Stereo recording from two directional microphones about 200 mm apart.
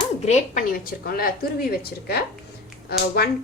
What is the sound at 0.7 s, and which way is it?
Speech, 45° left (ahead or behind).